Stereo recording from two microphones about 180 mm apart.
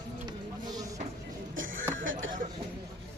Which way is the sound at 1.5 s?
90° right.